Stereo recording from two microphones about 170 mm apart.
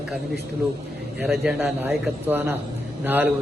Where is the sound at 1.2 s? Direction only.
5° right (ahead or behind).